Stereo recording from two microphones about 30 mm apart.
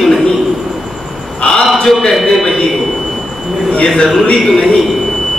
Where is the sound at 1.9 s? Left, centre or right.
Centre.